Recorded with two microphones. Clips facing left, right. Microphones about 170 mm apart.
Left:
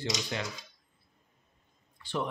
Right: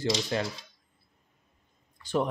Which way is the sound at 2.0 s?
40° right (ahead or behind).